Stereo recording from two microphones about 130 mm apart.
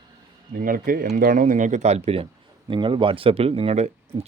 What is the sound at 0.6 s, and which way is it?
Speech, 90° right.